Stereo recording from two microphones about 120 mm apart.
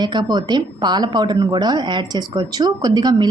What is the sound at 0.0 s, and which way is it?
A woman's voice, 35° right (ahead or behind).